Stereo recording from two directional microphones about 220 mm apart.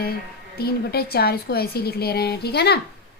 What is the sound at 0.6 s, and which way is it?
A woman's voice, 45° left (ahead or behind).